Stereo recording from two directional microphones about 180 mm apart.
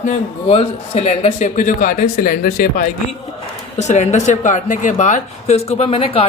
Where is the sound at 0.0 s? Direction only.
35° left (ahead or behind); by 2.9 s 55° left (ahead or behind).